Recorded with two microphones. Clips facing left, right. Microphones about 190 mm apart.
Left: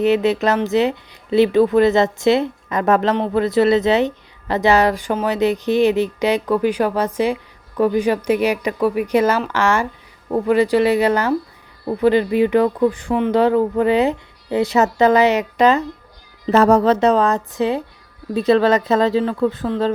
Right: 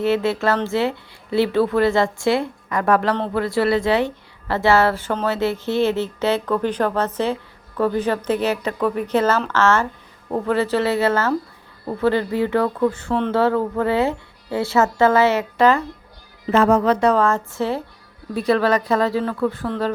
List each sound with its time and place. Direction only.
0.0 s speech: 20° left (ahead or behind)
16.5 s speech: 40° left (ahead or behind); by 19.9 s 20° left (ahead or behind)